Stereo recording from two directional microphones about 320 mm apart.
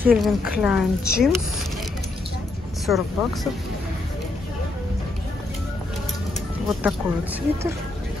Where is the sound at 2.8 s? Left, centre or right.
Centre.